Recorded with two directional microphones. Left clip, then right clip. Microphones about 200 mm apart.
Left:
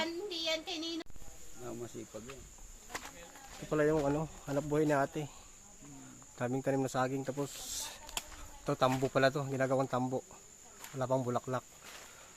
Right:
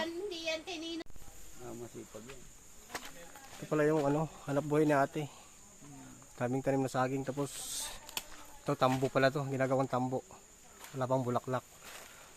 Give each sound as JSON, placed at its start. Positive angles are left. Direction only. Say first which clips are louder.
{"t": 0.0, "sound": "child singing", "louder": "left 1 dB", "side_deg": 15}
{"t": 3.7, "sound": "speech", "louder": "right 1 dB", "side_deg": -5}
{"t": 6.4, "sound": "speech", "louder": "right 1 dB", "side_deg": -5}
{"t": 8.0, "sound": "insect", "louder": "even", "side_deg": 10}
{"t": 8.6, "sound": "speech", "louder": "right 1 dB", "side_deg": 0}